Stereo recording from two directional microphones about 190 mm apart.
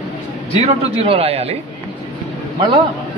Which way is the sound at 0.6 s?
30° right (ahead or behind).